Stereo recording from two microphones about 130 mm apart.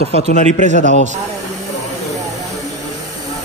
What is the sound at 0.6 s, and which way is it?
Speech, 90° left.